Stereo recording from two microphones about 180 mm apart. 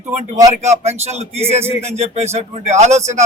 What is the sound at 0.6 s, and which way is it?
A man's voice, 40° right (ahead or behind).